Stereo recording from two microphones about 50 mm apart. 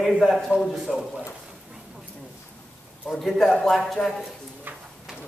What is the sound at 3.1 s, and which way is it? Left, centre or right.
Speech, centre.